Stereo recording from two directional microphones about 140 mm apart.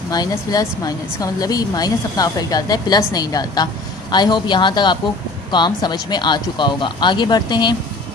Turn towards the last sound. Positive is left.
turn(degrees=30)  # may be behind; listen again after turning